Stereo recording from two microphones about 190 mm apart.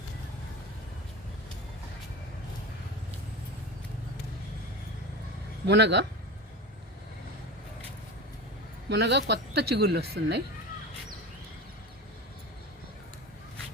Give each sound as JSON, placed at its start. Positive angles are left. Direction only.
{"t": 5.6, "sound": "speech", "side_deg": -65}
{"t": 8.9, "sound": "speech", "side_deg": -60}